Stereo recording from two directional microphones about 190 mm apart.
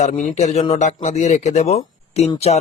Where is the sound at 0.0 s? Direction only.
40° left (ahead or behind).